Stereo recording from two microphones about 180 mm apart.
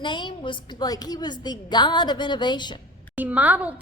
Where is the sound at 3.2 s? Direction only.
10° right (ahead or behind).